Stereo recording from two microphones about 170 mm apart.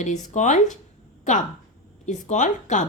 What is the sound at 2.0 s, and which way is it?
Speech, 45° left (ahead or behind).